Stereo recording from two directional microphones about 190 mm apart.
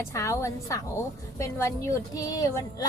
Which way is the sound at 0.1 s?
15° left (ahead or behind).